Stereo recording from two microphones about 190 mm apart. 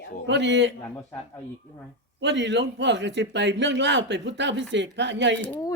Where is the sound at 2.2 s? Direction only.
70° right (ahead or behind).